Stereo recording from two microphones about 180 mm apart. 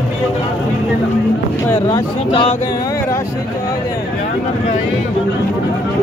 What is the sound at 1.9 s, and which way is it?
Speech, 25° left (ahead or behind).